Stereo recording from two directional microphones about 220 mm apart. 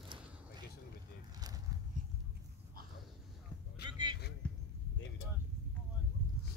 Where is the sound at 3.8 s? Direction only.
20° right (ahead or behind).